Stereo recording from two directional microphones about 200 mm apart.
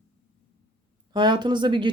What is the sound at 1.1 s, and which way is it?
Speech, 20° right (ahead or behind).